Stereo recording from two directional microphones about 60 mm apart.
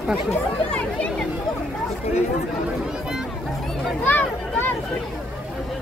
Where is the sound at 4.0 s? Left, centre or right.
Left.